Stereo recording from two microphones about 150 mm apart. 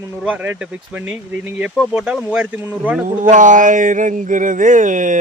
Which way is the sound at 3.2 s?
55° right (ahead or behind).